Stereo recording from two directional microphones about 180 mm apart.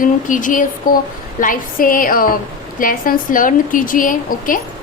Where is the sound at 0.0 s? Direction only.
45° left (ahead or behind).